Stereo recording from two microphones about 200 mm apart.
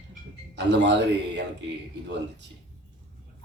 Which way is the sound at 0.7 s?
60° right (ahead or behind).